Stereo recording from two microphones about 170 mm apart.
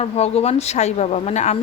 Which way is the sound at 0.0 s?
35° left (ahead or behind).